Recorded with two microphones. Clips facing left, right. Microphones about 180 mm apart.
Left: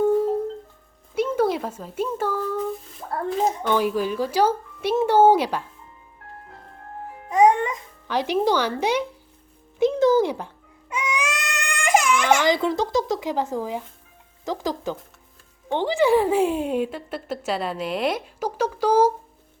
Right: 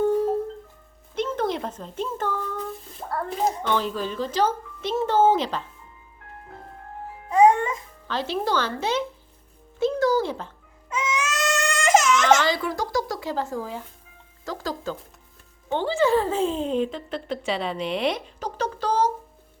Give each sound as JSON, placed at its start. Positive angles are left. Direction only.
{"t": 1.1, "sound": "a sound", "side_deg": 10}
{"t": 3.6, "sound": "a woman's voice", "side_deg": 10}
{"t": 7.3, "sound": "babbling", "side_deg": 15}
{"t": 9.8, "sound": "music", "side_deg": 20}
{"t": 14.4, "sound": "a woman's voice", "side_deg": 20}